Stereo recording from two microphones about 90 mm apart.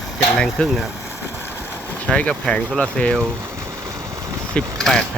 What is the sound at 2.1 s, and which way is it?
Speech, 10° left (ahead or behind).